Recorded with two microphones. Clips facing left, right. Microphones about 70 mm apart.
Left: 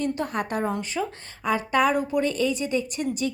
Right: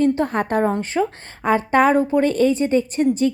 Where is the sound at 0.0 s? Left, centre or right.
Right.